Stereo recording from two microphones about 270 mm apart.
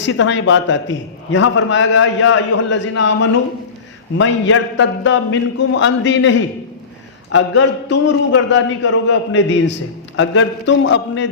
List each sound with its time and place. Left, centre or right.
0.0 s a man's voice: left